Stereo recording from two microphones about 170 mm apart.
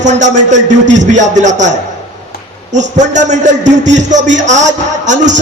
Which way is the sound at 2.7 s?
45° right (ahead or behind).